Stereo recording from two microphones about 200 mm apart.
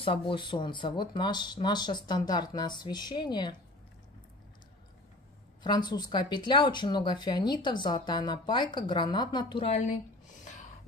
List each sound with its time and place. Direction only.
0.0 s speech: 25° left (ahead or behind)
5.6 s speech: 20° left (ahead or behind)